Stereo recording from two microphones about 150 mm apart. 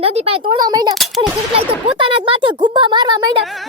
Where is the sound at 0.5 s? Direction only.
25° right (ahead or behind).